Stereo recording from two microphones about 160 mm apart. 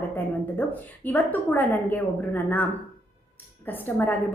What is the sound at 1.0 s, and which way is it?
A woman's voice, 10° left (ahead or behind).